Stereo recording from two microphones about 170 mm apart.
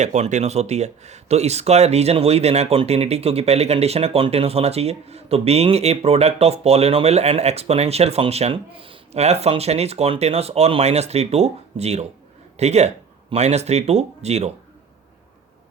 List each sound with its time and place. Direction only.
0.0 s speech: 45° right (ahead or behind)